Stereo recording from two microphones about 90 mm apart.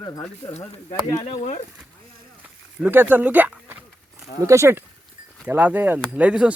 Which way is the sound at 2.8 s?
20° right (ahead or behind).